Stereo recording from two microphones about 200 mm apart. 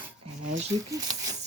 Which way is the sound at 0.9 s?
20° right (ahead or behind).